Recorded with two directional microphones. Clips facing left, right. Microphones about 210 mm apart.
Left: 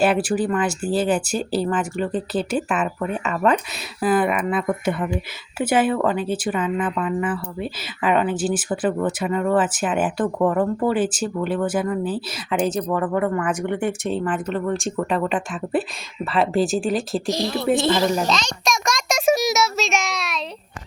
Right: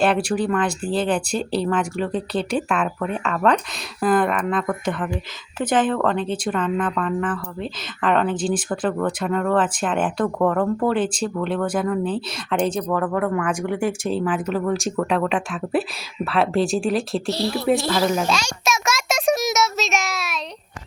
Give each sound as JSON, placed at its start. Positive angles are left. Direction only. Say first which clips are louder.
{"t": 0.0, "sound": "speech", "louder": "left 1 dB", "side_deg": 5}
{"t": 17.2, "sound": "speech", "louder": "even", "side_deg": 15}
{"t": 17.5, "sound": "a sound", "louder": "left 1 dB", "side_deg": 0}